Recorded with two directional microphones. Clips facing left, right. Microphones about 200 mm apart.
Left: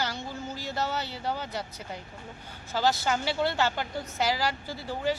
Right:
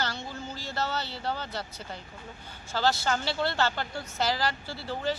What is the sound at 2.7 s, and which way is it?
Speech, 15° left (ahead or behind).